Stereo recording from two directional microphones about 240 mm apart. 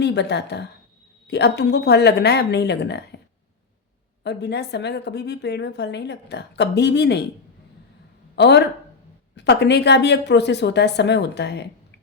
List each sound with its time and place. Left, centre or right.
0.0 s a woman's voice: left
4.2 s a woman's voice: left
8.4 s a woman's voice: left